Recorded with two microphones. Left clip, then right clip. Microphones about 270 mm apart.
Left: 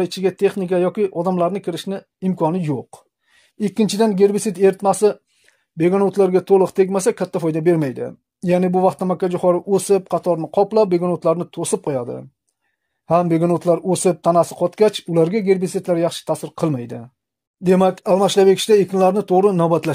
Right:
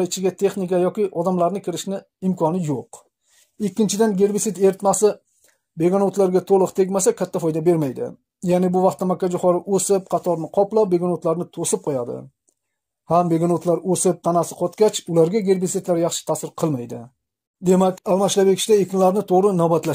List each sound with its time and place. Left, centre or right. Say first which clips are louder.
0.0 s speech: left 2 dB; left